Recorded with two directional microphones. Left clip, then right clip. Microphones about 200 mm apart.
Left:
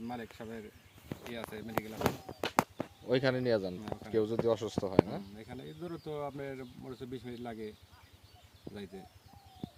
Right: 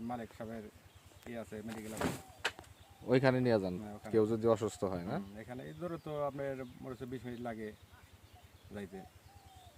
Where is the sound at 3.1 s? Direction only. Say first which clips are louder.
Even; 55° right (ahead or behind).